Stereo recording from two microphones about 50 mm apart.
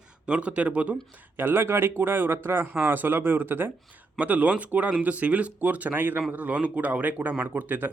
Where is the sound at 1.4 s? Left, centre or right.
Right.